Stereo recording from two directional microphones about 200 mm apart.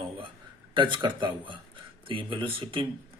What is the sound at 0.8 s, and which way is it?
A man's voice, 25° right (ahead or behind).